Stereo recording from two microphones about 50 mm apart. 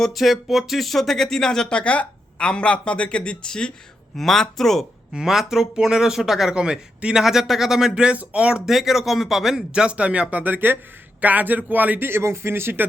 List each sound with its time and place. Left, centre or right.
0.0 s speech: centre
4.2 s speech: centre
5.1 s a man's voice: centre
6.5 s a man's voice: centre
8.6 s speech: centre
9.8 s speech: right
12.0 s speech: right